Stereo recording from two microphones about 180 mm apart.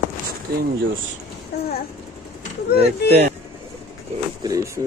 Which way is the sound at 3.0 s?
65° left (ahead or behind).